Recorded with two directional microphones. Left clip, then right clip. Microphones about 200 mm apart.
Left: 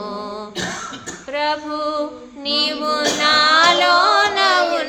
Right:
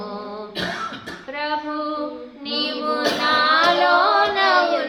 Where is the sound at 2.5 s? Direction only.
40° left (ahead or behind).